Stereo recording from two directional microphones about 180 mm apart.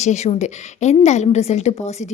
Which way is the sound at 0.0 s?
40° left (ahead or behind).